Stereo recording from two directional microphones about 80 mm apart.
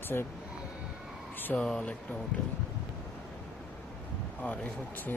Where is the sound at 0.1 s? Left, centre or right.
Left.